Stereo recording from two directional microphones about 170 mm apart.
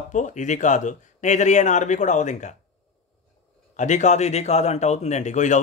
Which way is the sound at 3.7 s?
45° left (ahead or behind).